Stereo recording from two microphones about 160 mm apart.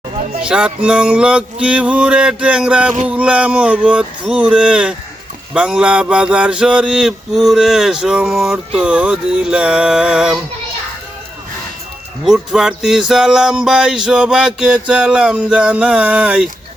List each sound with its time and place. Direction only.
0.4 s music: 5° right (ahead or behind)
5.5 s mantra: 5° right (ahead or behind)
12.2 s mantra: 5° right (ahead or behind)